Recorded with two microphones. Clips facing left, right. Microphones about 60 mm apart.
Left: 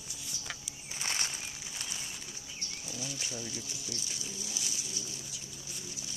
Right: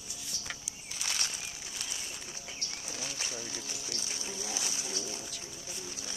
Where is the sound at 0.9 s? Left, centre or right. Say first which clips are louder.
Left 1 dB; left.